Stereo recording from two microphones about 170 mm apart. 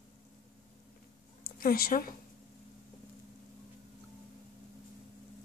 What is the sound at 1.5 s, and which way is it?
Speech, 60° left (ahead or behind).